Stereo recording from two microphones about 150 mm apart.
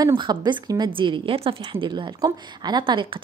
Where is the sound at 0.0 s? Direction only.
30° right (ahead or behind).